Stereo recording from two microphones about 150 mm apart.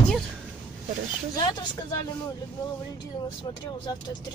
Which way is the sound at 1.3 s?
25° left (ahead or behind).